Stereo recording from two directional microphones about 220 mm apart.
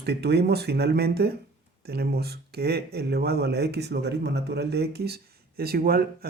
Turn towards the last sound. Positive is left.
turn(degrees=-45)  # may be behind; listen again after turning